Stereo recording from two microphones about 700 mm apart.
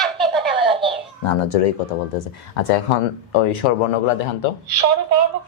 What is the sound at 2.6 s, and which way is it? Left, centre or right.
Speech, left.